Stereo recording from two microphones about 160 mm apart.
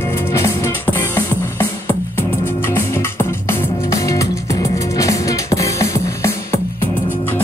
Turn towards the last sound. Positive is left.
turn(degrees=20)  # may be behind; listen again after turning